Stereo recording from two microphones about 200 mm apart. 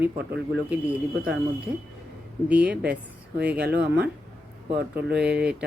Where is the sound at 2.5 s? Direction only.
5° right (ahead or behind).